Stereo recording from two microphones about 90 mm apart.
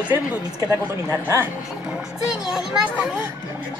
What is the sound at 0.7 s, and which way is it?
Speech, 30° right (ahead or behind).